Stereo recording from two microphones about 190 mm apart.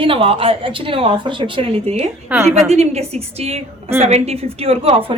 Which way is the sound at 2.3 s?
10° right (ahead or behind).